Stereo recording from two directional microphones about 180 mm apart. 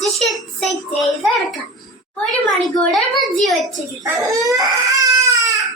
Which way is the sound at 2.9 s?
Centre (ahead or behind).